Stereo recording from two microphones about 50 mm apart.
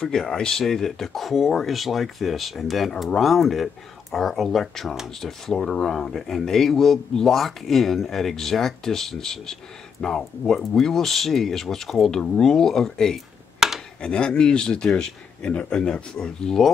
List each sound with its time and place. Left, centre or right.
0.0 s a man's voice: centre
13.6 s a sound: centre
14.0 s a man's voice: centre